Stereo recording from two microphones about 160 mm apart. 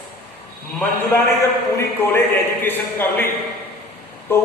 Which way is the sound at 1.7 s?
15° left (ahead or behind).